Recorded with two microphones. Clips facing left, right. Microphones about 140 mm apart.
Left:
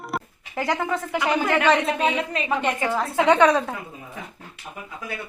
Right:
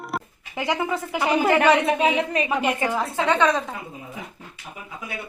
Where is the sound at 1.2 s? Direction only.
30° right (ahead or behind).